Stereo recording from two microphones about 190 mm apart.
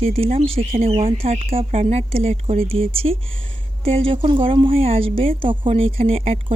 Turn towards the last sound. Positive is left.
turn(degrees=-30)  # may be behind; listen again after turning